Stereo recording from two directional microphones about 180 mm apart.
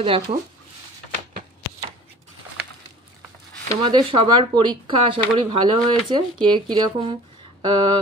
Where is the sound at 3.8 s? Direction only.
25° right (ahead or behind).